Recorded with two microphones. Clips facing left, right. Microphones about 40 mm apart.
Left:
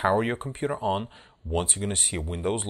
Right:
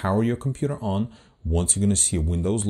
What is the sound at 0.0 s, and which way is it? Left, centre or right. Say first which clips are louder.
Speech: right 1 dB; left.